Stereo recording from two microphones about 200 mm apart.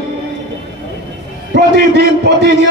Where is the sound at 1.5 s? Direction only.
55° right (ahead or behind).